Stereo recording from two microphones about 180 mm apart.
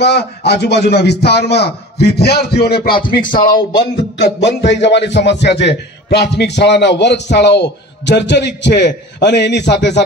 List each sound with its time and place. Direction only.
0.0 s a man's voice: 65° left (ahead or behind); by 3.3 s 50° left (ahead or behind)
3.9 s a man's voice: 75° left (ahead or behind)